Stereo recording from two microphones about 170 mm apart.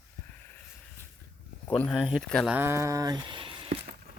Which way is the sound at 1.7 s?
5° left (ahead or behind).